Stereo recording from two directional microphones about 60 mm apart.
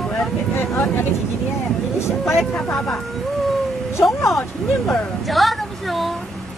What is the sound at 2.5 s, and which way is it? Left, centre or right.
Speech, centre.